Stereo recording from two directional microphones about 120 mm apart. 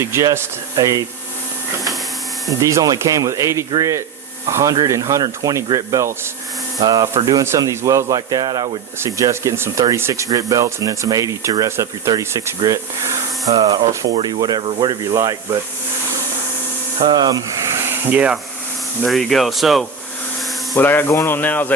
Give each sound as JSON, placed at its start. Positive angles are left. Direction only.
{"t": 0.0, "sound": "speech", "side_deg": -25}
{"t": 2.5, "sound": "speech", "side_deg": -25}
{"t": 17.1, "sound": "speech", "side_deg": -35}
{"t": 17.8, "sound": "a sound", "side_deg": -15}
{"t": 19.0, "sound": "speech", "side_deg": 0}
{"t": 20.7, "sound": "speech", "side_deg": 15}